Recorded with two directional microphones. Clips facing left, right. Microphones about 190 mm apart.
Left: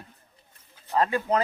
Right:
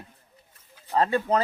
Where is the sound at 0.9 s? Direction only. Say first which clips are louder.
Right 1 dB; 35° right (ahead or behind).